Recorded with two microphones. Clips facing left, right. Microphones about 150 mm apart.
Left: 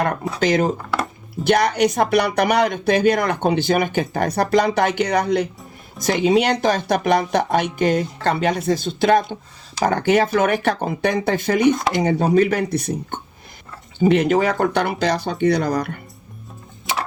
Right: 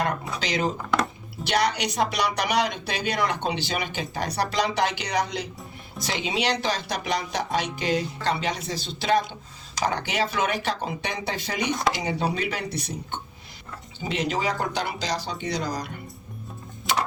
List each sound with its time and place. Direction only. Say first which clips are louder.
0.3 s speech: left 12 dB; 50° left (ahead or behind)